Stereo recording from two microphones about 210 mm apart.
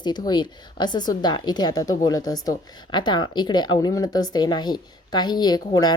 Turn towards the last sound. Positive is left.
turn(degrees=20)  # may be behind; listen again after turning